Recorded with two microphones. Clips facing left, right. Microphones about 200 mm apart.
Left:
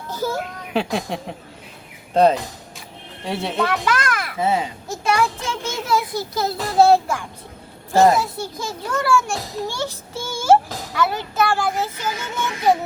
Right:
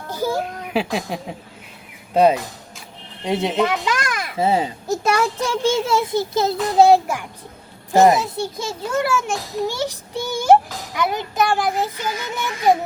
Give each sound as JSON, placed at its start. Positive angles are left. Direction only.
{"t": 0.1, "sound": "a child's voice", "side_deg": -15}
{"t": 2.1, "sound": "a sound", "side_deg": -10}
{"t": 3.2, "sound": "a child's voice", "side_deg": -20}
{"t": 4.4, "sound": "a child's voice", "side_deg": -30}
{"t": 5.8, "sound": "a child's voice", "side_deg": -25}